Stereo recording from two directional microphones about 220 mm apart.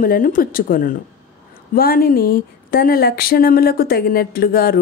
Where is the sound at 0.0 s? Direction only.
40° left (ahead or behind).